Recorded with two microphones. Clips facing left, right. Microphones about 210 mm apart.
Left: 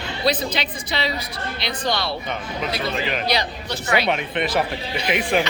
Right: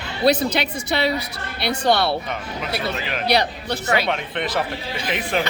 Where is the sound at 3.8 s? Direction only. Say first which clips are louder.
Even; 40° right (ahead or behind).